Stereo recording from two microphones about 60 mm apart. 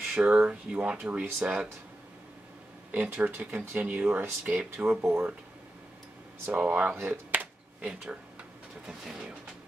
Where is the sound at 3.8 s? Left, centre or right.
Centre.